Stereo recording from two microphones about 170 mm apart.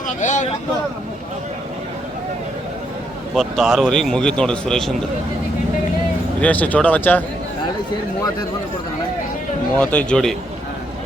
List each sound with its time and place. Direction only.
0.2 s speech: 45° left (ahead or behind)
3.3 s a man's voice: centre (ahead or behind)
6.4 s speech: 10° left (ahead or behind)
9.7 s speech: 5° left (ahead or behind)